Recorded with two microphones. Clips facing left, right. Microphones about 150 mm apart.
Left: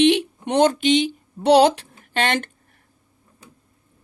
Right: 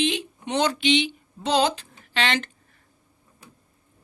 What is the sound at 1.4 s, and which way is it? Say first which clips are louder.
A woman's voice: left 8 dB; 65° left (ahead or behind).